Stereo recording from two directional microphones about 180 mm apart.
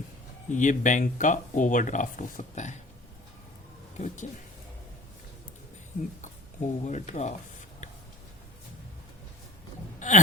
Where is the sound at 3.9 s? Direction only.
45° left (ahead or behind).